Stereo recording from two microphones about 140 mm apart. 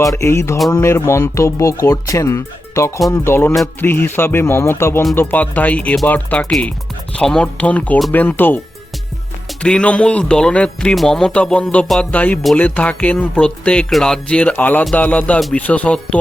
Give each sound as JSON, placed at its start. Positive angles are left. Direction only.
{"t": 0.0, "sound": "speech", "side_deg": 20}